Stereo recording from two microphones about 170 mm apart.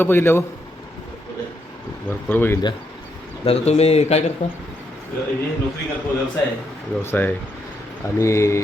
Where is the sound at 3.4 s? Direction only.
35° left (ahead or behind).